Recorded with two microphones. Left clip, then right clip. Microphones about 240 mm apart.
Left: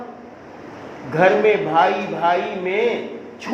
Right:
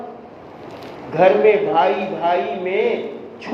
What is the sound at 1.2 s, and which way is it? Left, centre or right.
A man's voice, left.